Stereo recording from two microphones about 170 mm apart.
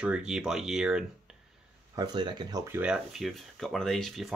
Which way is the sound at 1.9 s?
25° right (ahead or behind).